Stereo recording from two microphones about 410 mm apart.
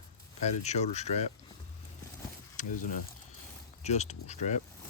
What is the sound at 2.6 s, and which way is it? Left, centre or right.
Speech, centre.